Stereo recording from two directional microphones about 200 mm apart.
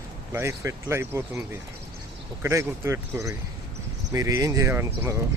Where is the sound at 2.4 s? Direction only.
15° right (ahead or behind).